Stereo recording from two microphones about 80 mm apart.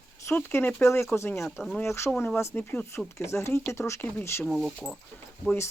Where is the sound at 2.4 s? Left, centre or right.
Left.